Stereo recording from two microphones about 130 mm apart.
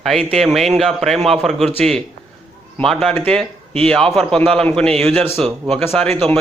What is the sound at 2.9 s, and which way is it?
Speech, centre (ahead or behind).